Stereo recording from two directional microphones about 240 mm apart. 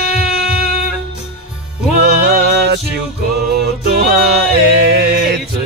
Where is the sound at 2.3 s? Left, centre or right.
Right.